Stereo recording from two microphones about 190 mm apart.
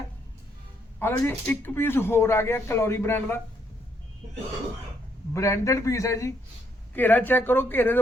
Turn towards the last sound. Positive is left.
turn(degrees=10)  # may be behind; listen again after turning